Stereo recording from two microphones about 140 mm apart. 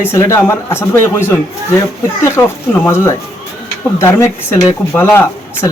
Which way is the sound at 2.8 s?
20° left (ahead or behind).